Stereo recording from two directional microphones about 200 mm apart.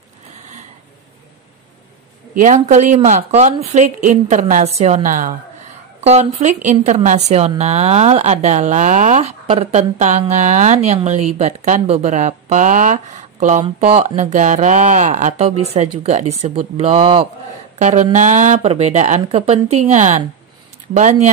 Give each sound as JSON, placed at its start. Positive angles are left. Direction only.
{"t": 2.3, "sound": "speech", "side_deg": -40}